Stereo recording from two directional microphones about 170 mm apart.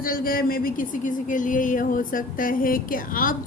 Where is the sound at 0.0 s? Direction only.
55° left (ahead or behind).